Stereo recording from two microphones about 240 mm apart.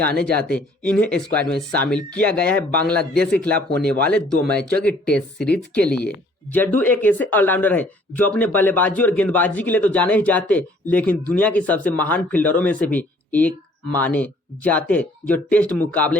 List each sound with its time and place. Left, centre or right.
0.0 s speech: centre